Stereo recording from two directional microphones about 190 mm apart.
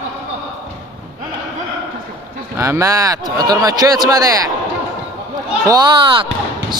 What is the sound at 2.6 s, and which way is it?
Speech, 15° right (ahead or behind).